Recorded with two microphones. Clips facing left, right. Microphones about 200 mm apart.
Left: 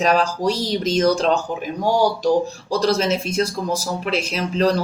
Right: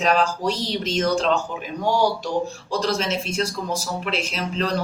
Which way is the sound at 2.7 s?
40° left (ahead or behind).